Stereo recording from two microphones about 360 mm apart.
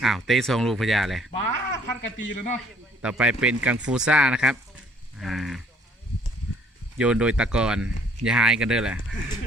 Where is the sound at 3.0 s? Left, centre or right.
Centre.